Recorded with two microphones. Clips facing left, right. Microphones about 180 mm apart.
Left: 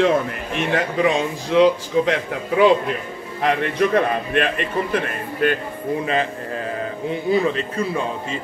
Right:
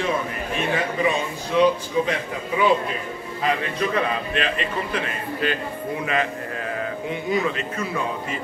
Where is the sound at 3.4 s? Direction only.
60° left (ahead or behind).